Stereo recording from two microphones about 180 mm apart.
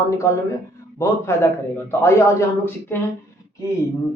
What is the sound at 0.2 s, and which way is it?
A man's voice, 15° left (ahead or behind).